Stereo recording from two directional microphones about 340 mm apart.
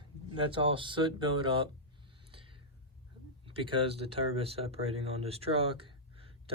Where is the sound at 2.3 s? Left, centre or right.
Centre.